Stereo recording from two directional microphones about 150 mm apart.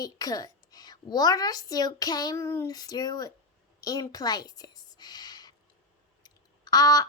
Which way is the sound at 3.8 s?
25° left (ahead or behind).